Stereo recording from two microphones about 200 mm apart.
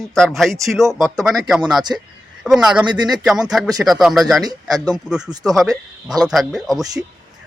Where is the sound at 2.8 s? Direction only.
20° right (ahead or behind).